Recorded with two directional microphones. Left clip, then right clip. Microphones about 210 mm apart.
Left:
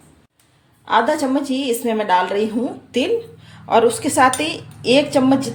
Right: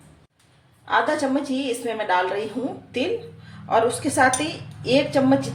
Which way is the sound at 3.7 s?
50° left (ahead or behind).